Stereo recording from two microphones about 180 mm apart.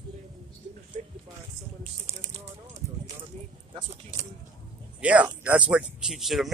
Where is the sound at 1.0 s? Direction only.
35° right (ahead or behind).